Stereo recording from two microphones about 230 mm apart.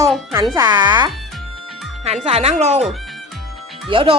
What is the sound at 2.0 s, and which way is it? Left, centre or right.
Speech, right.